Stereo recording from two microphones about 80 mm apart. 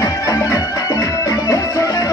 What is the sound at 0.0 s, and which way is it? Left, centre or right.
Music, left.